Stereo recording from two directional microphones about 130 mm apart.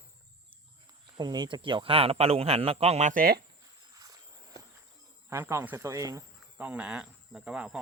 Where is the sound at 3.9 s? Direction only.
25° right (ahead or behind).